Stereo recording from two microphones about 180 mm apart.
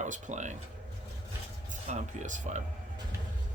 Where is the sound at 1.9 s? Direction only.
45° right (ahead or behind).